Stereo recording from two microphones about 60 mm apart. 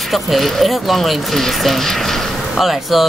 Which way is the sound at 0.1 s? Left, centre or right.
Centre.